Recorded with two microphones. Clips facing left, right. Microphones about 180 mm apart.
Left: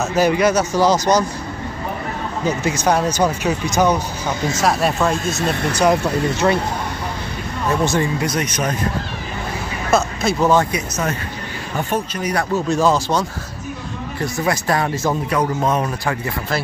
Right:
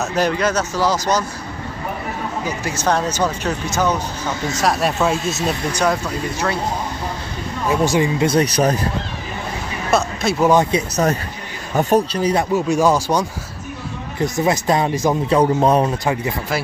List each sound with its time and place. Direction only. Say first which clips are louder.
0.0 s speech: left 3 dB; 5° left (ahead or behind)
2.4 s speech: left 4 dB; 20° left (ahead or behind)
4.6 s speech: even; centre (ahead or behind)
6.0 s speech: left 5 dB; 20° left (ahead or behind)
7.6 s speech: right 2 dB; 10° right (ahead or behind)
8.2 s speech: right 5 dB; 30° right (ahead or behind)
9.8 s a sound: left 1 dB; centre (ahead or behind)
10.5 s speech: right 3 dB; 20° right (ahead or behind)
11.7 s speech: right 7 dB; 35° right (ahead or behind)
12.5 s speech: left 1 dB; 10° right (ahead or behind)
15.3 s speech: right 6 dB; 30° right (ahead or behind)
16.1 s speech: right 2 dB; 15° right (ahead or behind)